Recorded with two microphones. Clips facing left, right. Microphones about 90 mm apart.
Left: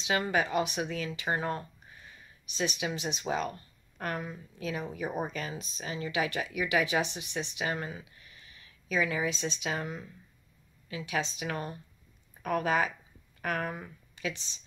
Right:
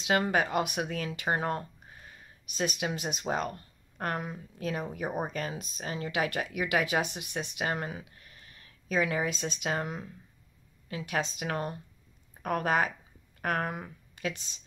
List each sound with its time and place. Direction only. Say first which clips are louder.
0.0 s speech: right 2 dB; 50° right (ahead or behind)
10.9 s speech: right 1 dB; 50° right (ahead or behind)